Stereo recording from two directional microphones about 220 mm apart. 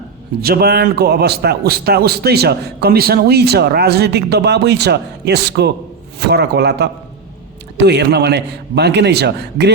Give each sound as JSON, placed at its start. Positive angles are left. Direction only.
{"t": 0.4, "sound": "a man's voice", "side_deg": -45}